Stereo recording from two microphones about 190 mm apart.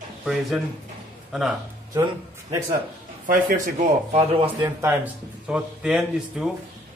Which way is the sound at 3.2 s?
45° right (ahead or behind).